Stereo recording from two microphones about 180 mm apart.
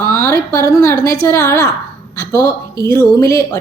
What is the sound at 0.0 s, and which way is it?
A woman's voice, 20° left (ahead or behind).